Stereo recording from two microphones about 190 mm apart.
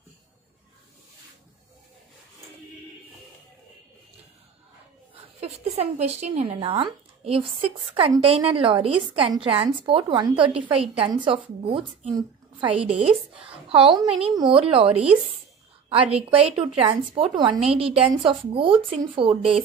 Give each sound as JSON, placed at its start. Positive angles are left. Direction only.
{"t": 5.8, "sound": "a woman's voice", "side_deg": -35}
{"t": 14.9, "sound": "a woman's voice", "side_deg": -5}
{"t": 16.3, "sound": "a woman's voice", "side_deg": -30}